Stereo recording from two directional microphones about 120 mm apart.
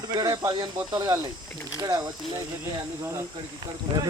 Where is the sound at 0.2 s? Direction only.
30° right (ahead or behind).